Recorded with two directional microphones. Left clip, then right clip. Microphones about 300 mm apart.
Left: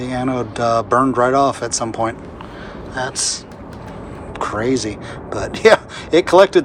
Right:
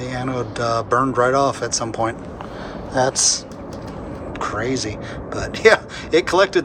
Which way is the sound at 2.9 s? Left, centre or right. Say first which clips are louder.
Right 4 dB; centre.